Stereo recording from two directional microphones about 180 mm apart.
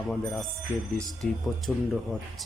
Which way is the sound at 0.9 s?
Centre (ahead or behind).